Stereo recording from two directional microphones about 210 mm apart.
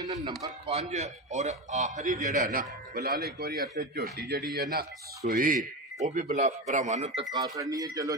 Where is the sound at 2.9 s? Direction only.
50° right (ahead or behind).